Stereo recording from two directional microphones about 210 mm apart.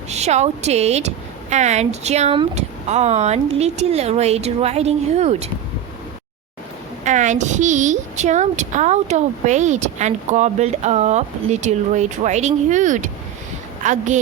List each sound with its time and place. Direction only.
0.1 s a woman's voice: 30° right (ahead or behind)
7.0 s a woman's voice: 35° right (ahead or behind)